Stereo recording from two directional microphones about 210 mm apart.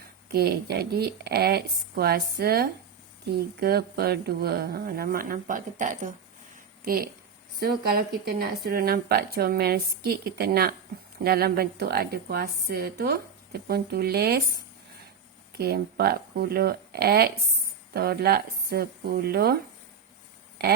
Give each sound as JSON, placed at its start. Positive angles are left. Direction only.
{"t": 0.3, "sound": "a woman's voice", "side_deg": -50}